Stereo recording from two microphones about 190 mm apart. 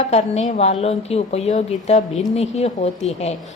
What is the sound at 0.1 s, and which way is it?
A woman's voice, 35° left (ahead or behind).